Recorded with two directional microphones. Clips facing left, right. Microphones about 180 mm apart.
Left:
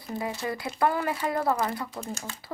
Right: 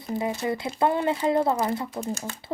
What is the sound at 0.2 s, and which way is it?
Speech, 20° right (ahead or behind).